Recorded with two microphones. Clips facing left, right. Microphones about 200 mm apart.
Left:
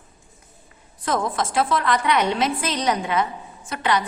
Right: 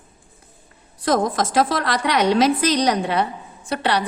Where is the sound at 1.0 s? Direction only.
40° right (ahead or behind).